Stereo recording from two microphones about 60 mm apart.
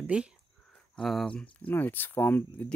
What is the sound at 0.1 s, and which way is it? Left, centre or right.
Speech, centre.